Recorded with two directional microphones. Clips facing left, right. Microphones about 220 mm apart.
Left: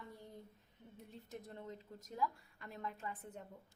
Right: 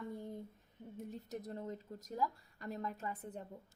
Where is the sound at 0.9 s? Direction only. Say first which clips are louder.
Right 6 dB; 45° right (ahead or behind).